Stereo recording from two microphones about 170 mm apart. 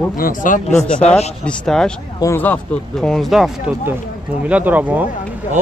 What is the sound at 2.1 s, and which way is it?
Speech, 15° left (ahead or behind).